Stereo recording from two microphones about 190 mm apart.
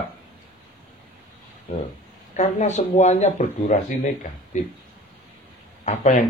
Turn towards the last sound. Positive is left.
turn(degrees=40)  # may be behind; listen again after turning